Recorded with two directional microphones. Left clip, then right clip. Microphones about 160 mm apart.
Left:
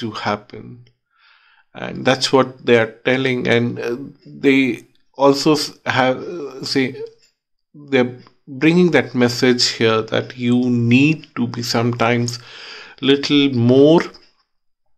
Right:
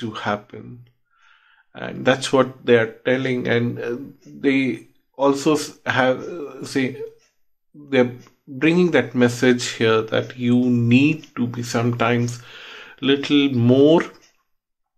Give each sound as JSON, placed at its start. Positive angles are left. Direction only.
{"t": 0.0, "sound": "speech", "side_deg": 25}